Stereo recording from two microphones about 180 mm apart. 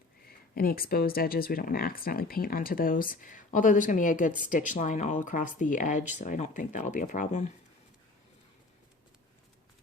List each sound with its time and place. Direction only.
0.3 s speech: 55° left (ahead or behind)